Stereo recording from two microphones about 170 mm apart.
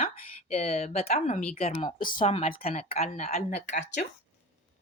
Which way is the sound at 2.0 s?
50° left (ahead or behind).